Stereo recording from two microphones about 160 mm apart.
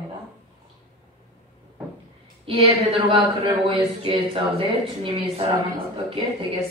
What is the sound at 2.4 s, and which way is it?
Speech, 35° right (ahead or behind).